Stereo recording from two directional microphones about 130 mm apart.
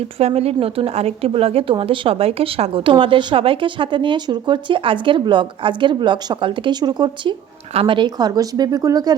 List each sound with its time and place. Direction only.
0.0 s speech: 50° right (ahead or behind); by 9.1 s 30° right (ahead or behind)